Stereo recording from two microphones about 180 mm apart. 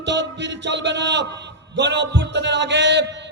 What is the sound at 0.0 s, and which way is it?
A man's voice, 80° right.